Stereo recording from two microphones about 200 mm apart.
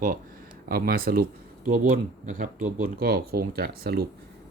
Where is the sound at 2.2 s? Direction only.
40° right (ahead or behind).